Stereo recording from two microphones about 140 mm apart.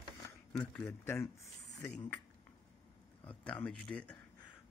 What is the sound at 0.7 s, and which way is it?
Speech, 15° left (ahead or behind).